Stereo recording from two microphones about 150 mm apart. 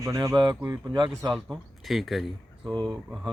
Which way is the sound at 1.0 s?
30° right (ahead or behind).